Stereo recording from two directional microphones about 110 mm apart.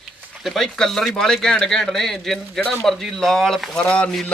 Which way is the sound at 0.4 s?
5° left (ahead or behind).